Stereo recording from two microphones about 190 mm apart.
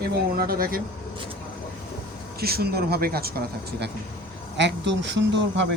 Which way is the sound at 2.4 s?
55° right (ahead or behind).